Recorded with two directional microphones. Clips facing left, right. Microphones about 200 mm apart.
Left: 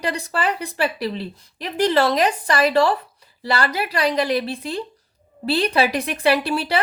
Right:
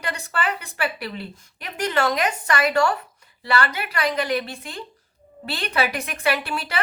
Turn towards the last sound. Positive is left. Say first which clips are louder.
# left 6 dB
turn(degrees=35)  # may be behind; listen again after turning